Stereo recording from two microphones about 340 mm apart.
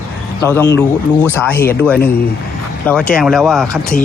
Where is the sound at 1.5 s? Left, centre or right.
Left.